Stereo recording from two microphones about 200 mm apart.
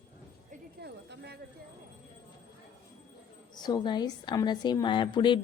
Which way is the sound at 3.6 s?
20° left (ahead or behind).